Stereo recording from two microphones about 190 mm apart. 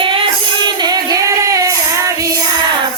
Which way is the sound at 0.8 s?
20° right (ahead or behind).